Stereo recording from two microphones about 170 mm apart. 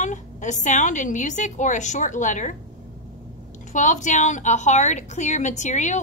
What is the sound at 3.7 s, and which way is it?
A woman's voice, 45° left (ahead or behind).